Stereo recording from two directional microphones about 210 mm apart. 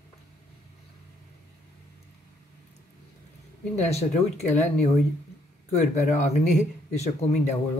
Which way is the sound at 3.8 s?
30° left (ahead or behind).